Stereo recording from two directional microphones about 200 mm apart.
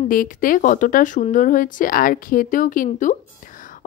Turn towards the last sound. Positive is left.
turn(degrees=40)  # may be behind; listen again after turning